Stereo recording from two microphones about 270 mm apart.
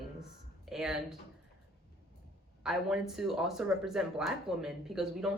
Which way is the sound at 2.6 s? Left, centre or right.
Centre.